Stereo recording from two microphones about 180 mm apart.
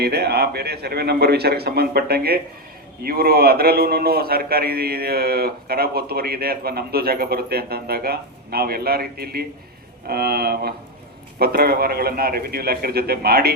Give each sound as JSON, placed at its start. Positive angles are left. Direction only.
{"t": 0.0, "sound": "a man's voice", "side_deg": -65}